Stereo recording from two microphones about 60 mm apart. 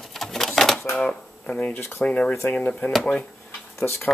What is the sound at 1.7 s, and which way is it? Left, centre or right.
Speech, left.